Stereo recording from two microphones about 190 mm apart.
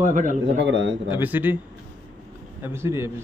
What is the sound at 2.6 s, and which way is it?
Speech, 15° right (ahead or behind).